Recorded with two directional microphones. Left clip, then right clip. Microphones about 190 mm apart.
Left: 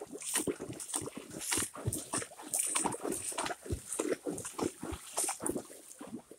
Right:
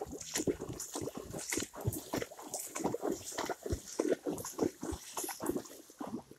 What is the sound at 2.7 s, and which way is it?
Boat, 15° right (ahead or behind).